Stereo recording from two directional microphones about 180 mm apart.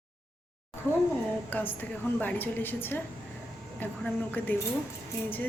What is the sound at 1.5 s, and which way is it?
A woman's voice, 10° left (ahead or behind).